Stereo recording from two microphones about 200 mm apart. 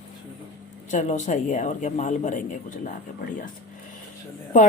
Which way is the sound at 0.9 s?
40° left (ahead or behind).